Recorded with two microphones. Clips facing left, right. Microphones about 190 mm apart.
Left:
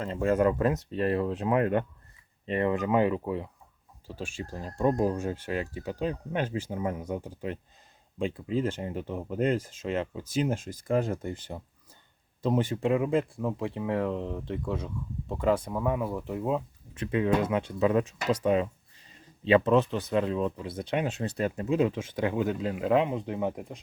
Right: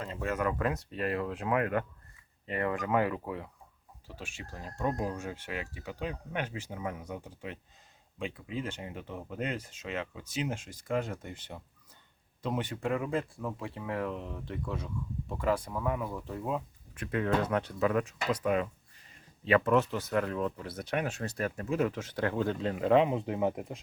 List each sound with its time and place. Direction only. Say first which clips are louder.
0.0 s speech: left 8 dB; 30° left (ahead or behind)
4.0 s speech: left 8 dB; 30° left (ahead or behind); by 23.8 s centre (ahead or behind)